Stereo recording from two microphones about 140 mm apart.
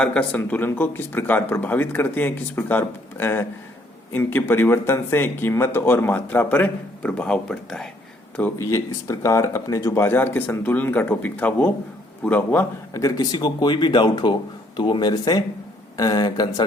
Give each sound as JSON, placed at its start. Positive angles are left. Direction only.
{"t": 0.0, "sound": "speech", "side_deg": 5}
{"t": 8.4, "sound": "speech", "side_deg": 15}
{"t": 12.9, "sound": "speech", "side_deg": 25}